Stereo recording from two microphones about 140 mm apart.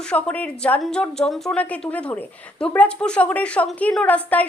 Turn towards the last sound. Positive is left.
turn(degrees=10)  # may be behind; listen again after turning